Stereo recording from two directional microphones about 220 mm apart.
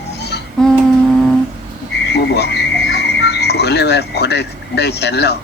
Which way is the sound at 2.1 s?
50° left (ahead or behind).